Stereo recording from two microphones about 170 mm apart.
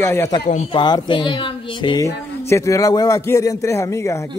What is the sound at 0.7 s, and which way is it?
Speech, 25° left (ahead or behind).